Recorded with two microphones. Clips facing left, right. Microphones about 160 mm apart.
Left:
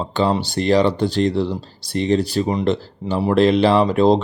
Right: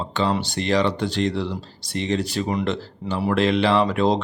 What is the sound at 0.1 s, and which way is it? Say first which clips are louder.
Speech: left 4 dB; 35° left (ahead or behind).